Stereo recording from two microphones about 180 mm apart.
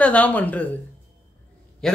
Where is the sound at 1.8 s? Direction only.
5° left (ahead or behind).